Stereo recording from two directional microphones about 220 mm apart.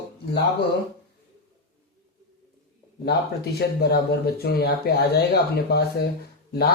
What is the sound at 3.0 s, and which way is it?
Speech, 50° left (ahead or behind).